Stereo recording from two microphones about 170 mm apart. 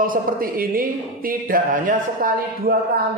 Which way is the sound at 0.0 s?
55° right (ahead or behind).